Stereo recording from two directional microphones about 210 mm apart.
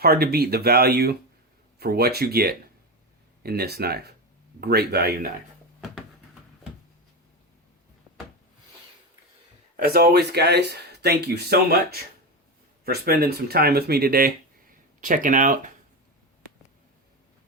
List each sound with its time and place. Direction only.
0.0 s speech: 50° right (ahead or behind)
9.7 s speech: 45° right (ahead or behind)